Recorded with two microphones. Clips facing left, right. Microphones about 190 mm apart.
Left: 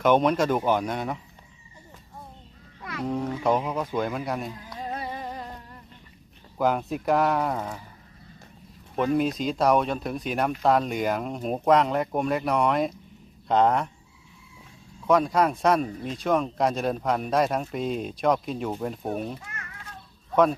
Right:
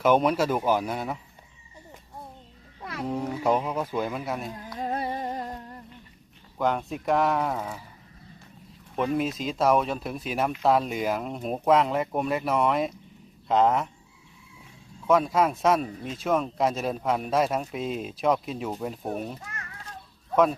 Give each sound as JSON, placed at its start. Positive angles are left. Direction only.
{"t": 0.0, "sound": "speech", "side_deg": -5}
{"t": 3.1, "sound": "speech", "side_deg": -5}
{"t": 4.9, "sound": "humming", "side_deg": -40}
{"t": 6.6, "sound": "speech", "side_deg": 0}
{"t": 9.0, "sound": "speech", "side_deg": 0}
{"t": 15.0, "sound": "speech", "side_deg": 0}